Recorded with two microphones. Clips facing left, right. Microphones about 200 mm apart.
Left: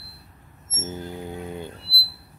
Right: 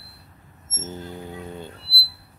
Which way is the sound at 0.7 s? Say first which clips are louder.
Left 2 dB; 10° left (ahead or behind).